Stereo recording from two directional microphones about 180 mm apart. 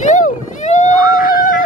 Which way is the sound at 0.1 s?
45° left (ahead or behind).